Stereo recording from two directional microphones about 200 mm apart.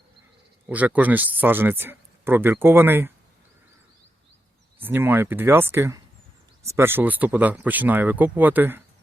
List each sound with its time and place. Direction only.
0.7 s speech: 5° right (ahead or behind)
4.8 s speech: 10° right (ahead or behind)